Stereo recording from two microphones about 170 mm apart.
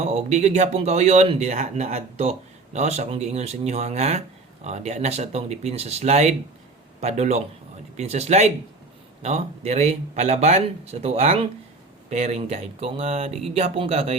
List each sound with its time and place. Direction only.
0.0 s speech: 40° right (ahead or behind)